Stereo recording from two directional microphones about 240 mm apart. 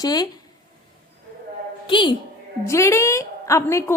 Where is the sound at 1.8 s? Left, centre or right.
Centre.